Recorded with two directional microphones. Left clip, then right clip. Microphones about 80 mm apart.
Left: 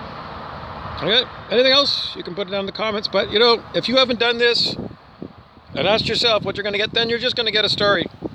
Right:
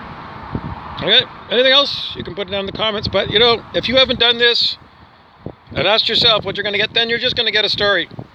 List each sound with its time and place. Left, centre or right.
0.9 s speech: left